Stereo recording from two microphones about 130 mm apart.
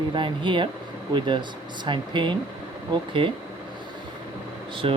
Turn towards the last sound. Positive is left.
turn(degrees=-45)  # may be behind; listen again after turning